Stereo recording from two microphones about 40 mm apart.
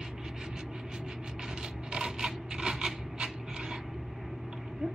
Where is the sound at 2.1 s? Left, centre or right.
Centre.